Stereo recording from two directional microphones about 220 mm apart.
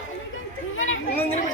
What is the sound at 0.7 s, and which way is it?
Chatter, 65° left (ahead or behind).